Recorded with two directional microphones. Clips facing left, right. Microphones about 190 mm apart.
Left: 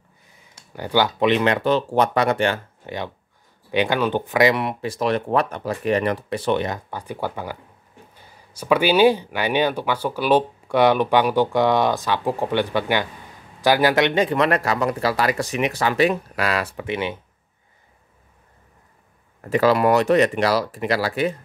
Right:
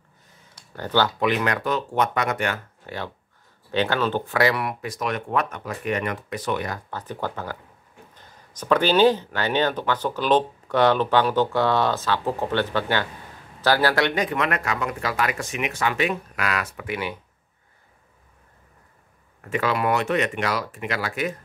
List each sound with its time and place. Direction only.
0.7 s speech: 15° left (ahead or behind)
6.9 s speech: 10° left (ahead or behind)
19.5 s speech: 35° left (ahead or behind)